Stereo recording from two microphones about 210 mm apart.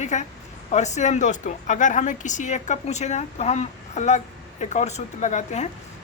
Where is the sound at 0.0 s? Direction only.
35° left (ahead or behind).